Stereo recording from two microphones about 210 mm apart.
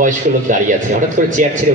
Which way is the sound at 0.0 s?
35° right (ahead or behind).